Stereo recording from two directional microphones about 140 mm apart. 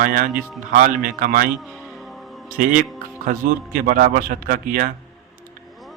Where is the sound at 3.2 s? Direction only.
85° right.